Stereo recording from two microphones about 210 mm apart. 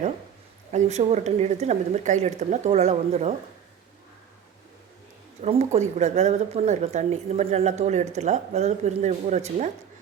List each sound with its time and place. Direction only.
0.7 s speech: 30° right (ahead or behind)
5.4 s speech: 30° right (ahead or behind)